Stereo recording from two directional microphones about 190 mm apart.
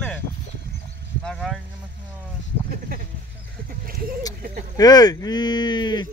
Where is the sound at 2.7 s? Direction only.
50° right (ahead or behind).